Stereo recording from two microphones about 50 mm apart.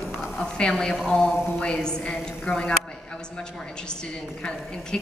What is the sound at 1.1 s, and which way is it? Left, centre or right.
A woman's voice, centre.